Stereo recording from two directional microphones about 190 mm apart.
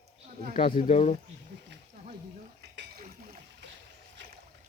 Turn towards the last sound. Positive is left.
turn(degrees=-60)  # may be behind; listen again after turning